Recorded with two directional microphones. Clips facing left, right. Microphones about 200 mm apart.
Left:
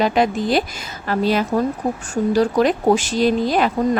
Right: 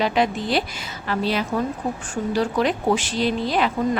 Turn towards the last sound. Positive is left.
turn(degrees=45)  # may be behind; listen again after turning